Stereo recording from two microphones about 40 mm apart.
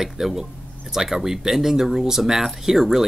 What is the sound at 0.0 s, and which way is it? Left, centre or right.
A man's voice, centre.